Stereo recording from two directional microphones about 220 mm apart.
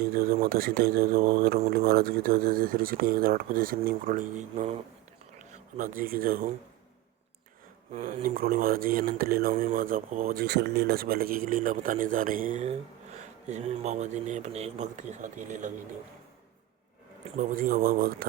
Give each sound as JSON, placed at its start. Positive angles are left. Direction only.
{"t": 0.1, "sound": "speech", "side_deg": -45}
{"t": 7.9, "sound": "speech", "side_deg": -40}
{"t": 17.5, "sound": "speech", "side_deg": -40}